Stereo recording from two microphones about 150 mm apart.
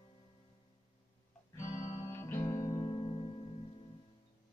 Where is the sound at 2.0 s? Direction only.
20° left (ahead or behind); by 3.4 s 35° left (ahead or behind).